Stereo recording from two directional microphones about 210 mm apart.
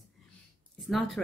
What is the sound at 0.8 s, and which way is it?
Speech, centre (ahead or behind).